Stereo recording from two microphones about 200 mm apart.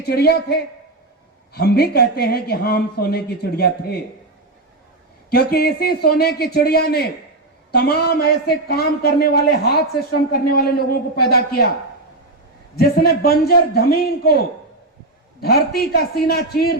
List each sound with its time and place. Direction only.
0.0 s a man's voice: 55° left (ahead or behind)
5.3 s a man's voice: 50° left (ahead or behind)
12.7 s a man's voice: 50° left (ahead or behind)